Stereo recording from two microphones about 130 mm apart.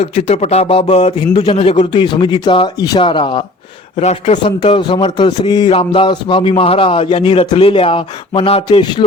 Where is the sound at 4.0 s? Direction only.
60° left (ahead or behind).